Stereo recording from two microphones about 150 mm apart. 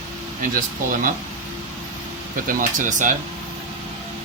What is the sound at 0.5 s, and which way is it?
Speech, 65° right (ahead or behind).